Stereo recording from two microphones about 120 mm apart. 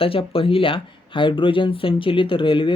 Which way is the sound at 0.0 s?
50° left (ahead or behind).